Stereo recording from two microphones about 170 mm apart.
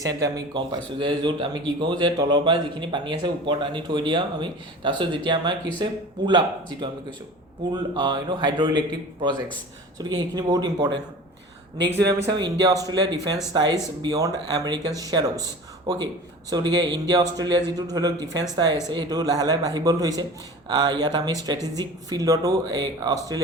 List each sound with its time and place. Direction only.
0.0 s a man's voice: 20° right (ahead or behind)
10.0 s a man's voice: 25° right (ahead or behind)
12.0 s a man's voice: 25° right (ahead or behind)